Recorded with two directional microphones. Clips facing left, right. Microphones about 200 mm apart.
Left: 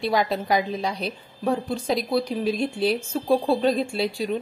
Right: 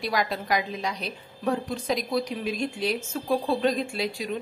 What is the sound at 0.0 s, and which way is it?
A woman's voice, 25° left (ahead or behind).